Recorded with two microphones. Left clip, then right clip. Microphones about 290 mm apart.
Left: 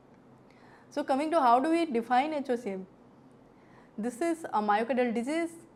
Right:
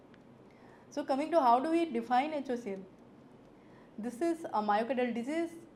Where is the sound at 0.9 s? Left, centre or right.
Left.